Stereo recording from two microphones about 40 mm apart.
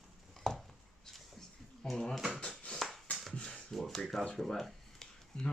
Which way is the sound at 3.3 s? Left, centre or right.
Left.